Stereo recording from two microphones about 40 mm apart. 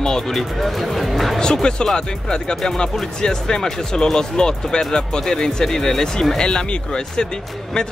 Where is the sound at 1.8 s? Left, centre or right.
Centre.